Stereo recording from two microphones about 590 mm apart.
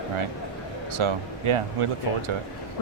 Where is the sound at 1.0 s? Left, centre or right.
Right.